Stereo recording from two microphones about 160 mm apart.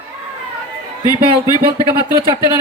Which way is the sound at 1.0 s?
25° left (ahead or behind).